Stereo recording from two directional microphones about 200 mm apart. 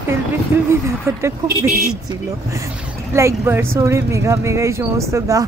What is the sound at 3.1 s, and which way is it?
Speech, 15° right (ahead or behind).